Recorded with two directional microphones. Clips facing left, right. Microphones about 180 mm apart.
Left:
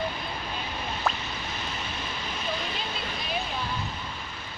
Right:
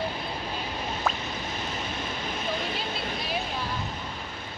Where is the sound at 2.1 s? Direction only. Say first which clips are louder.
Right 1 dB; 50° right (ahead or behind).